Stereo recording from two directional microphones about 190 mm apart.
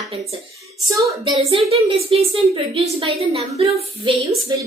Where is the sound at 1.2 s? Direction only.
25° right (ahead or behind).